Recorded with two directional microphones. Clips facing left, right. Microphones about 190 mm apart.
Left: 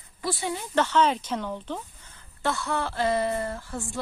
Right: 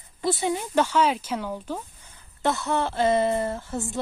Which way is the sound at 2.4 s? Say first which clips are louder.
Right 3 dB; 20° right (ahead or behind).